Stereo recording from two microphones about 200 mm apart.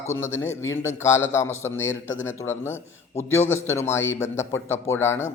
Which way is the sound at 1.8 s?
70° left (ahead or behind).